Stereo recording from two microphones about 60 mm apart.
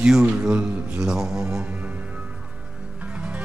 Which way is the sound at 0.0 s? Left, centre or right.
Centre.